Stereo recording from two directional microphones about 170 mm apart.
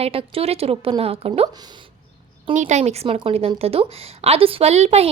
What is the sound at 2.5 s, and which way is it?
A woman's voice, 45° right (ahead or behind).